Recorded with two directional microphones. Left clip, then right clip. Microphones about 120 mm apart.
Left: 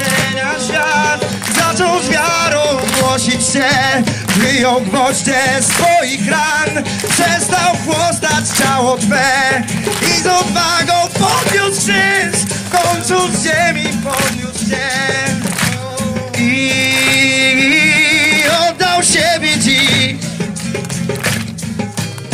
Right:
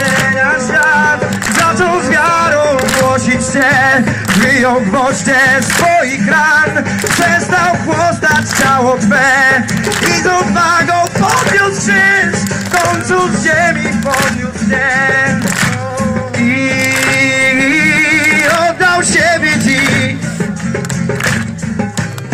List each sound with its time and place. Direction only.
0.2 s music: 40° left (ahead or behind)
4.6 s music: 35° left (ahead or behind)
5.3 s music: 50° left (ahead or behind)
16.3 s music: 50° left (ahead or behind)